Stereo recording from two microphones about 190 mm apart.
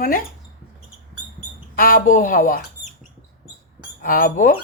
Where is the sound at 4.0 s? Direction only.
45° left (ahead or behind).